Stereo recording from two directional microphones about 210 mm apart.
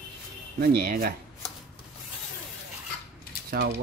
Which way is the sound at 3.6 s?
50° right (ahead or behind).